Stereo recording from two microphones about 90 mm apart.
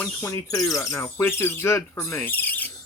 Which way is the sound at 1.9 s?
25° left (ahead or behind).